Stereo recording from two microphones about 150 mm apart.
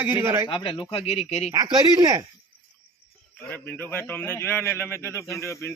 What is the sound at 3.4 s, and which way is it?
A man's voice, 10° left (ahead or behind).